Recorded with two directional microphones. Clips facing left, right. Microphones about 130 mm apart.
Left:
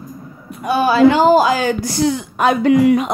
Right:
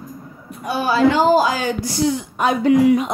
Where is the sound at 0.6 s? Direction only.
80° left.